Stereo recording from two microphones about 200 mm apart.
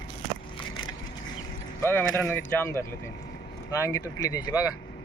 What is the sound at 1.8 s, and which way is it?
Speech, 10° left (ahead or behind).